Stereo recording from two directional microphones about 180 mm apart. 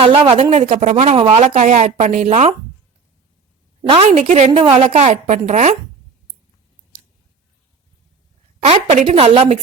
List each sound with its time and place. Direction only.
0.0 s speech: 30° right (ahead or behind)
3.8 s a woman's voice: 30° right (ahead or behind)
4.2 s speech: 45° right (ahead or behind)
8.6 s speech: 35° right (ahead or behind)